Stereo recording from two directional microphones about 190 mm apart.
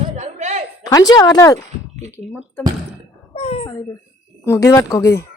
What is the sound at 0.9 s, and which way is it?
Speech, 20° left (ahead or behind).